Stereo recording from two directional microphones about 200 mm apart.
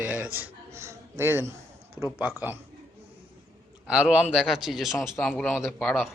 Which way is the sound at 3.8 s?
5° right (ahead or behind).